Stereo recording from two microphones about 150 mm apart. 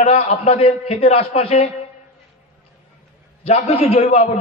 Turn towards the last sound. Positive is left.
turn(degrees=45)  # may be behind; listen again after turning